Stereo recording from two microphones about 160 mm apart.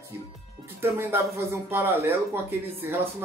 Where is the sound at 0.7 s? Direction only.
15° right (ahead or behind).